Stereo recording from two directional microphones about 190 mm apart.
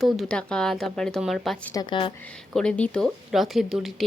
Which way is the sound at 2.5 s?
5° left (ahead or behind).